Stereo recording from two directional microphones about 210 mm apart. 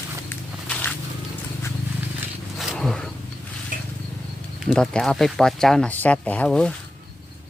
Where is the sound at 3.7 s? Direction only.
40° right (ahead or behind).